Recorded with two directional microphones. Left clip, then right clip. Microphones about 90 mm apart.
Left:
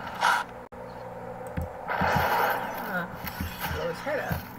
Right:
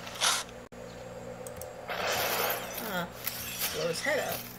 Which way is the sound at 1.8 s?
35° right (ahead or behind).